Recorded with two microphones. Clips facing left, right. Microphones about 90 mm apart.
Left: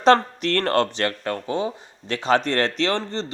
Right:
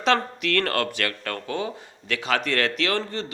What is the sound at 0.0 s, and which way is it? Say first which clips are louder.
Speech: left 6 dB; 35° left (ahead or behind).